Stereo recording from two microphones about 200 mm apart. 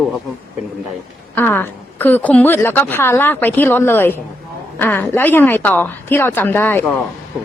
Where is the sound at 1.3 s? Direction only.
10° left (ahead or behind).